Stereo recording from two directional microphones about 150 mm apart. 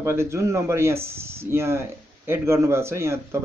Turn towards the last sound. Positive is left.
turn(degrees=-20)  # may be behind; listen again after turning